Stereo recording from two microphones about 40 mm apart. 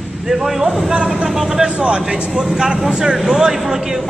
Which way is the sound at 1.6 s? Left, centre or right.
Right.